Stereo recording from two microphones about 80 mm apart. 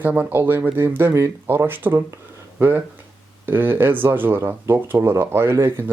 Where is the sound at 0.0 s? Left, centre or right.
Right.